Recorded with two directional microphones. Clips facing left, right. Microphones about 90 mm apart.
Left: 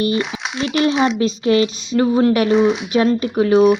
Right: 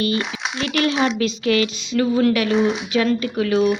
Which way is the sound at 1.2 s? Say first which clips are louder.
Left 4 dB; 35° left (ahead or behind).